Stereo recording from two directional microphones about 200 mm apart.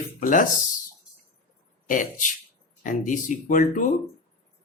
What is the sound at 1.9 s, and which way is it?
Speech, 40° left (ahead or behind).